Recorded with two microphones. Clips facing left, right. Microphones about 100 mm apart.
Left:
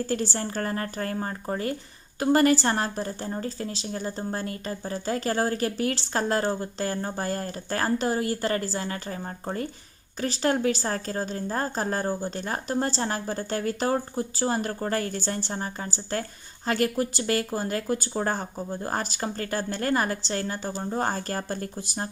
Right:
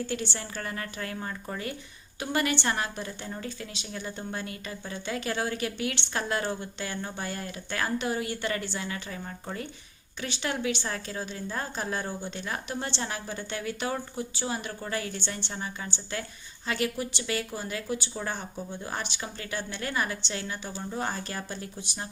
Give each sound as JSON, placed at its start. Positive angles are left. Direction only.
{"t": 0.0, "sound": "a woman's voice", "side_deg": 40}